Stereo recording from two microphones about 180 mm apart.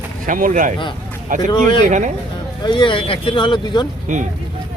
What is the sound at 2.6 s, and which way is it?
Speech, 25° left (ahead or behind).